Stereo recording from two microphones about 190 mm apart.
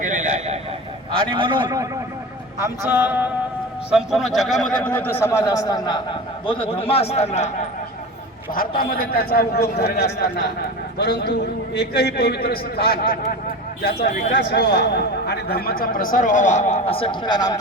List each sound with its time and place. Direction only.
0.0 s a sound: 40° right (ahead or behind)
1.3 s a man's voice: 25° right (ahead or behind); by 7.5 s 35° left (ahead or behind)
8.5 s a man's voice: 50° left (ahead or behind); by 17.6 s 20° left (ahead or behind)